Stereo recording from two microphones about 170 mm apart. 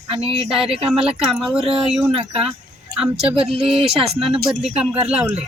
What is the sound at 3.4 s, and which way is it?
Speech, 35° right (ahead or behind).